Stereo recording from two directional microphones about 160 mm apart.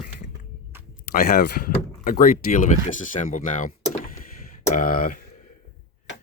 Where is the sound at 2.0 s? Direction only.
60° left (ahead or behind).